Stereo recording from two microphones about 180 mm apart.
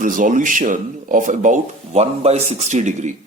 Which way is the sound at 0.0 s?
45° right (ahead or behind).